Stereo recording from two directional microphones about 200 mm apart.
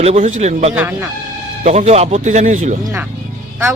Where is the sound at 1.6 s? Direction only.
35° right (ahead or behind).